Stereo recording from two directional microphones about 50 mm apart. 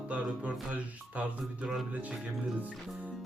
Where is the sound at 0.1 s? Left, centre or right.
Right.